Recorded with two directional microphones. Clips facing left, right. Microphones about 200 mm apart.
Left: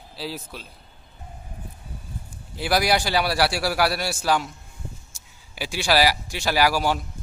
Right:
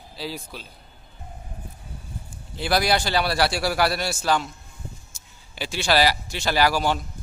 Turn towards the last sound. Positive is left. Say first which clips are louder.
# even
turn(degrees=10)  # may be behind; listen again after turning